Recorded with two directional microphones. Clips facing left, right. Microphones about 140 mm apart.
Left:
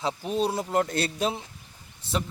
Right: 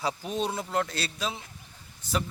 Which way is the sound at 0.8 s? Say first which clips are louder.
Left 5 dB; 50° left (ahead or behind).